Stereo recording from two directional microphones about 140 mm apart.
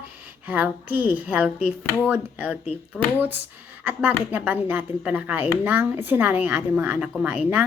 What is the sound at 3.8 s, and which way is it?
A woman's voice, 15° right (ahead or behind).